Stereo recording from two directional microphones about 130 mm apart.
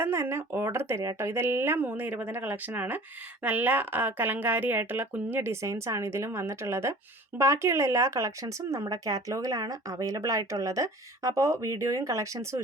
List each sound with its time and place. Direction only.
0.0 s a woman's voice: 20° right (ahead or behind)